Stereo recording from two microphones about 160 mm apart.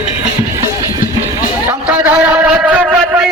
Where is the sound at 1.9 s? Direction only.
5° right (ahead or behind).